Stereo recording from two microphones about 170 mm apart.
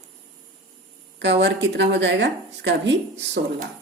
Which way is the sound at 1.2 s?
90° right.